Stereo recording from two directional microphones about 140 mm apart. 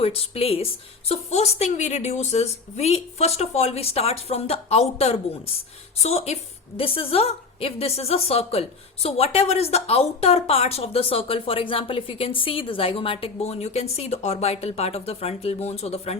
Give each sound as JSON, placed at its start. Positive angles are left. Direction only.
{"t": 0.0, "sound": "a woman's voice", "side_deg": 45}